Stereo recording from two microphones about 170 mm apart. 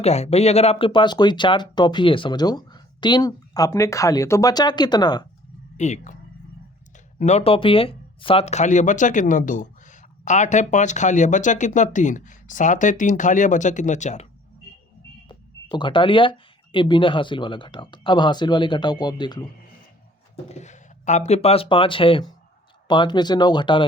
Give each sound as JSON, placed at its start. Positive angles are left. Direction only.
{"t": 0.0, "sound": "speech", "side_deg": 40}
{"t": 5.7, "sound": "speech", "side_deg": 45}
{"t": 15.3, "sound": "speech", "side_deg": 30}
{"t": 20.5, "sound": "speech", "side_deg": 45}